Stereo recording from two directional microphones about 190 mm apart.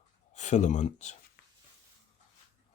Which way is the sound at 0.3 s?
40° left (ahead or behind).